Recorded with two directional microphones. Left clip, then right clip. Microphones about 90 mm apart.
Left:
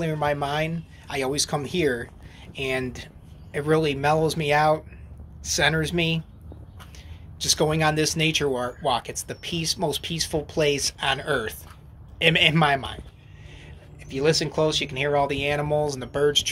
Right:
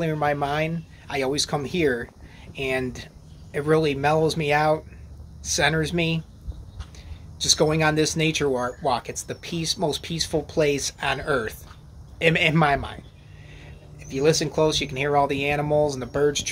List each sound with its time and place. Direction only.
0.0 s speech: 40° right (ahead or behind)
7.3 s speech: 45° right (ahead or behind)
14.0 s speech: 45° right (ahead or behind)